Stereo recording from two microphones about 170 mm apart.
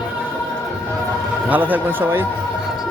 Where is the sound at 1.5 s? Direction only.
10° right (ahead or behind).